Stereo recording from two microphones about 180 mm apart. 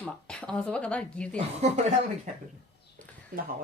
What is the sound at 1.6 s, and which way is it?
Speech, 40° right (ahead or behind).